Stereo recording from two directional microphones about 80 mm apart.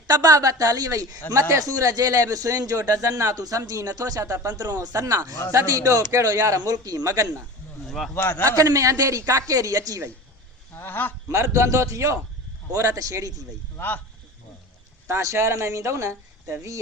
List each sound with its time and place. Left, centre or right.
0.1 s a man's voice: right
7.9 s speech: centre
8.1 s a man's voice: left
8.4 s a man's voice: right
10.8 s speech: left
11.3 s a man's voice: right
13.7 s speech: left
15.0 s speech: right